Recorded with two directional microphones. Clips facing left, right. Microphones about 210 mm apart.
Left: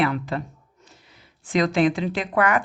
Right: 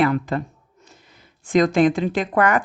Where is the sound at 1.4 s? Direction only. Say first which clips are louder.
Right 4 dB; 45° right (ahead or behind).